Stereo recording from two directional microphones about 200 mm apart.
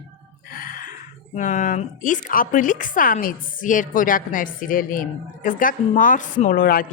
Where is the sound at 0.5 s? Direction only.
45° left (ahead or behind).